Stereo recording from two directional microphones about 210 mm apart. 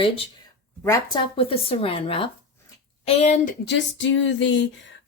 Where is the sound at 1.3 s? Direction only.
25° left (ahead or behind).